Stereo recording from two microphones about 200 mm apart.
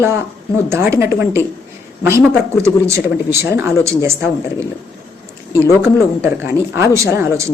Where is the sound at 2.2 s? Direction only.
5° left (ahead or behind).